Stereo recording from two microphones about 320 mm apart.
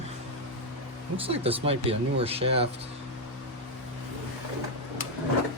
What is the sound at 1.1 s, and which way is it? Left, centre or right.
Speech, centre.